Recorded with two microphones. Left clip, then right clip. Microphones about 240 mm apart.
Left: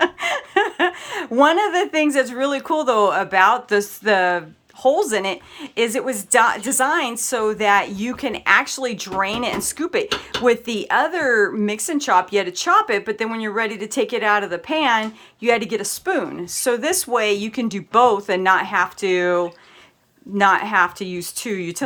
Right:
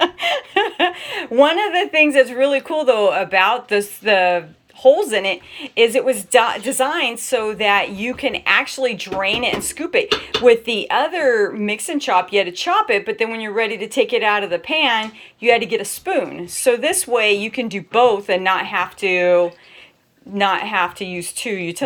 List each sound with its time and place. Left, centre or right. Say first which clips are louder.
0.0 s chuckle: right 2 dB; centre
2.1 s speech: right 5 dB; left